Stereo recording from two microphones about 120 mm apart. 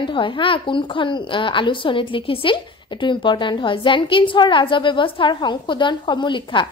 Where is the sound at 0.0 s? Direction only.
45° left (ahead or behind).